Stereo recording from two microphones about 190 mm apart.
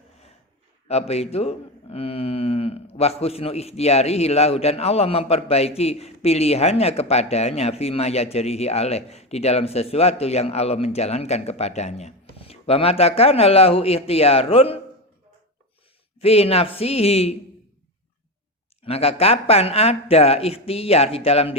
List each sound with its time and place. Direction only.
0.9 s a man's voice: 35° left (ahead or behind)
16.2 s a man's voice: 30° left (ahead or behind)
18.9 s a man's voice: 30° left (ahead or behind)